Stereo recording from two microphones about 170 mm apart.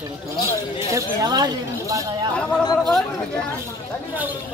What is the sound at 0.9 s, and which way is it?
Speech, 20° right (ahead or behind).